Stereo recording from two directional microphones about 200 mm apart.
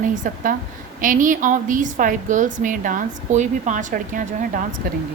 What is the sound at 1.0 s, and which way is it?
A woman's voice, 40° right (ahead or behind).